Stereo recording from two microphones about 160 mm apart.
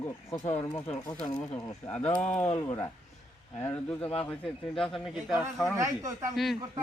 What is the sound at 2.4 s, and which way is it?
Speech, 45° left (ahead or behind).